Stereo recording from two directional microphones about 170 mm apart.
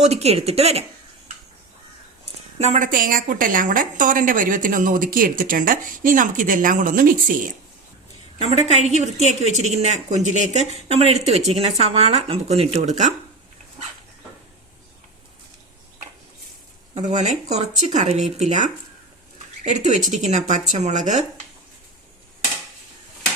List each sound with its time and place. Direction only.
0.0 s a woman's voice: 40° right (ahead or behind)
2.6 s a woman's voice: 45° right (ahead or behind)
8.4 s a woman's voice: 40° right (ahead or behind)
16.9 s a woman's voice: 45° right (ahead or behind)